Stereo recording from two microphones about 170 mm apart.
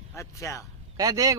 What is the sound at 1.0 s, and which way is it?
Speech, 20° right (ahead or behind).